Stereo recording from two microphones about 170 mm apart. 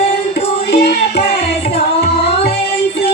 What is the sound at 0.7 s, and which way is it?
Music, 75° left (ahead or behind).